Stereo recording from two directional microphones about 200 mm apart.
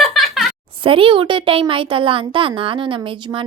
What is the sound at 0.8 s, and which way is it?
A woman's voice, 25° right (ahead or behind).